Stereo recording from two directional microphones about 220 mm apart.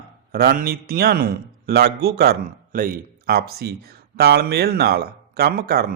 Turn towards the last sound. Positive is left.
turn(degrees=-45)  # may be behind; listen again after turning